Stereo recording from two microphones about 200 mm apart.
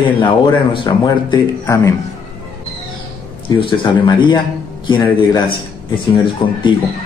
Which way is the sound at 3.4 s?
25° left (ahead or behind).